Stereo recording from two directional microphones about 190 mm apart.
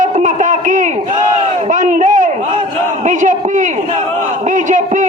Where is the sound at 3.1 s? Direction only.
40° right (ahead or behind).